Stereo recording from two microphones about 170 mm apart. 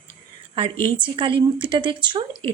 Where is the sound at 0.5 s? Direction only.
30° right (ahead or behind).